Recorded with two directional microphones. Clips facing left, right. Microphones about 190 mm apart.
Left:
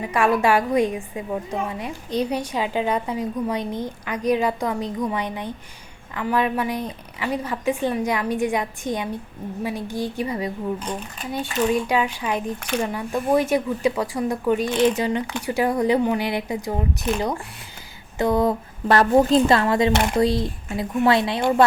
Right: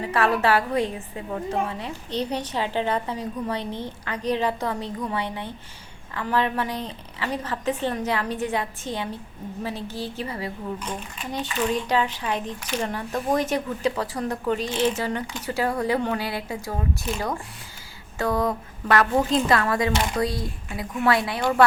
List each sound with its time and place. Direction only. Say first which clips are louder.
0.0 s a woman's voice: left 2 dB; 15° left (ahead or behind)
11.7 s a woman's voice: left 3 dB; 10° left (ahead or behind)
12.5 s speech: left 4 dB; 55° left (ahead or behind)
12.8 s a woman's voice: left 1 dB; 10° left (ahead or behind)
18.2 s a woman's voice: left 4 dB; 20° left (ahead or behind)